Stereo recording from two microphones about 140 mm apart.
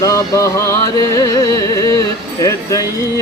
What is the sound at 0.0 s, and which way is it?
Music, 25° left (ahead or behind).